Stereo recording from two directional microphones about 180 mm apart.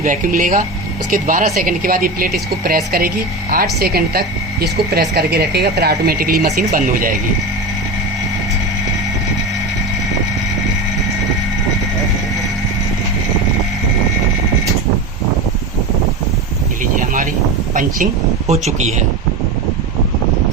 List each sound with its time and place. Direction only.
0.0 s a woman's voice: 50° right (ahead or behind)
17.7 s speech: 40° right (ahead or behind)